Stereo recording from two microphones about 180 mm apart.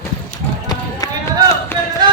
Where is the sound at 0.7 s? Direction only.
20° left (ahead or behind).